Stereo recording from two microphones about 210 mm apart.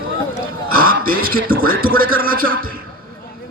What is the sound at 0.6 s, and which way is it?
A man's voice, 45° right (ahead or behind).